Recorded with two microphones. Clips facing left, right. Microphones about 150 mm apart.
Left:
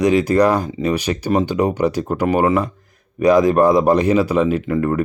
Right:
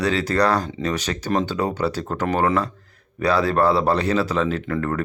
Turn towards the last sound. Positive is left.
turn(degrees=15)  # may be behind; listen again after turning